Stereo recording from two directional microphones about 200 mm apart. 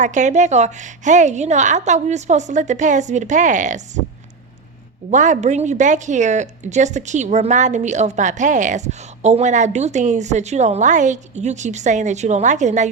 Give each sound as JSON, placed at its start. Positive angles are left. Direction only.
{"t": 0.0, "sound": "speech", "side_deg": -40}
{"t": 5.1, "sound": "speech", "side_deg": -40}